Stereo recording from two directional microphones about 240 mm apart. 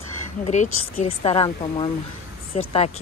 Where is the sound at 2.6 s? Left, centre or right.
Left.